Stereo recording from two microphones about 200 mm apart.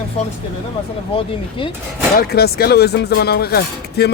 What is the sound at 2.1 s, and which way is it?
Speech, 50° left (ahead or behind).